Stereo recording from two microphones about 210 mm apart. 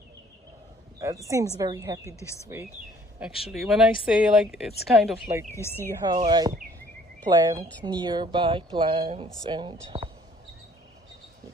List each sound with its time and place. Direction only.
0.9 s a woman's voice: 15° right (ahead or behind)
3.4 s speech: centre (ahead or behind)
5.5 s speech: 10° left (ahead or behind)
6.0 s a woman's voice: 20° right (ahead or behind)